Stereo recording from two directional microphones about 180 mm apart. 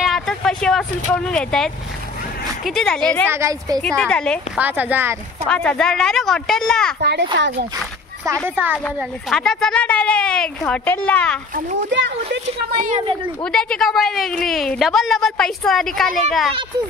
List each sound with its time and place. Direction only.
0.0 s a woman's voice: centre (ahead or behind)
3.3 s a woman's voice: 15° right (ahead or behind)
3.8 s a woman's voice: 5° left (ahead or behind)
4.6 s a woman's voice: 10° right (ahead or behind)
5.5 s a woman's voice: 5° left (ahead or behind)
7.0 s a child's voice: 70° right (ahead or behind)
7.3 s speech: 80° right
8.5 s a woman's voice: 10° right (ahead or behind)
8.8 s a woman's voice: 5° left (ahead or behind)
13.4 s a woman's voice: 5° left (ahead or behind)